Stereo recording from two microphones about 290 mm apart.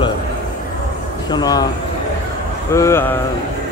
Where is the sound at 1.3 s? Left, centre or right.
Centre.